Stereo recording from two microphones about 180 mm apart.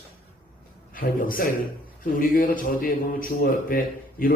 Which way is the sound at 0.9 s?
50° left (ahead or behind).